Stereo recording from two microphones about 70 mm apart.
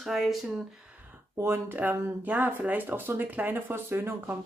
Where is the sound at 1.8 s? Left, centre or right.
Right.